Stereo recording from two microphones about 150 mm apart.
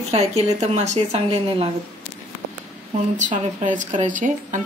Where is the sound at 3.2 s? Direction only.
60° right (ahead or behind).